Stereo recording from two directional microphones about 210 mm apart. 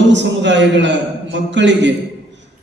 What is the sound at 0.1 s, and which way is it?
A man's voice, 60° right (ahead or behind).